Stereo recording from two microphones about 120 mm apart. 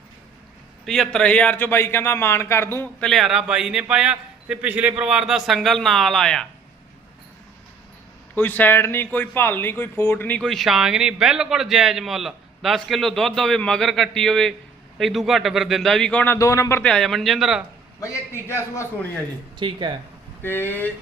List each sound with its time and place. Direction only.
0.9 s a man's voice: 5° left (ahead or behind); by 2.9 s 20° left (ahead or behind)
3.0 s speech: centre (ahead or behind)
8.4 s speech: 15° left (ahead or behind)
16.2 s a man's voice: 20° left (ahead or behind)
16.8 s speech: 5° left (ahead or behind)
18.0 s a man's voice: 25° left (ahead or behind)
19.5 s speech: 40° right (ahead or behind)
20.4 s speech: 15° left (ahead or behind)